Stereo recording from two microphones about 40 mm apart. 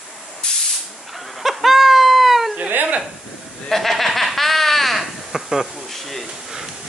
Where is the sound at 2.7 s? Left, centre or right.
Right.